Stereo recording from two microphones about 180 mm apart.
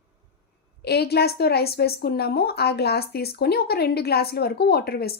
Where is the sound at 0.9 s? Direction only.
65° left (ahead or behind).